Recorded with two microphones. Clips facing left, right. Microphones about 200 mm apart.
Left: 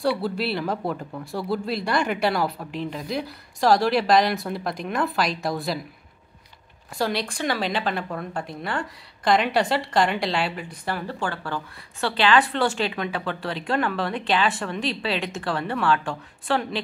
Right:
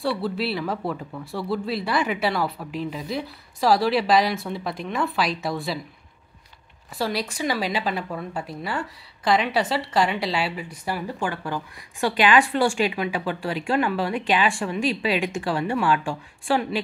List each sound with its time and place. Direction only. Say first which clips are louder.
0.2 s speech: even; centre (ahead or behind)
7.0 s a woman's voice: even; 5° right (ahead or behind)